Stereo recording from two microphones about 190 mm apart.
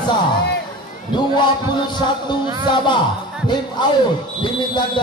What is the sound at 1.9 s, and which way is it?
A man's voice, 25° left (ahead or behind).